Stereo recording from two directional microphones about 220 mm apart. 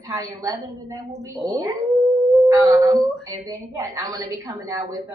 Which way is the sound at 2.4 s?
15° right (ahead or behind).